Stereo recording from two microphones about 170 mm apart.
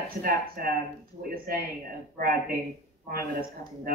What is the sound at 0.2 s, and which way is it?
Speech, 55° right (ahead or behind).